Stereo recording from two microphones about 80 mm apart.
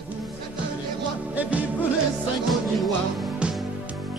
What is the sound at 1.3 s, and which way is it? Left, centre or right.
Music, centre.